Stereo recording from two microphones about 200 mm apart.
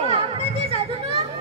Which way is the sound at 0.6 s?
30° right (ahead or behind).